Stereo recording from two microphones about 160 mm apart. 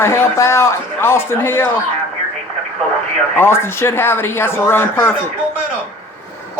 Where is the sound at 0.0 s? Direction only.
15° left (ahead or behind).